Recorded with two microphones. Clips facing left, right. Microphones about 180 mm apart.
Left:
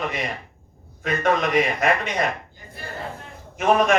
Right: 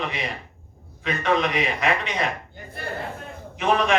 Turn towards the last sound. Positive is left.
turn(degrees=45)  # may be behind; listen again after turning